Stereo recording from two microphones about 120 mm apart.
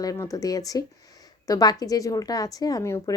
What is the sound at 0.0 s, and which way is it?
Speech, 30° left (ahead or behind).